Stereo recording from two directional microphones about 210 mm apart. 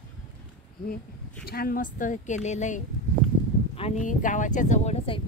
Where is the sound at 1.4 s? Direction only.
45° left (ahead or behind).